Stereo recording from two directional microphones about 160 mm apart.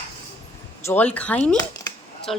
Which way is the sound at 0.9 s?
10° left (ahead or behind).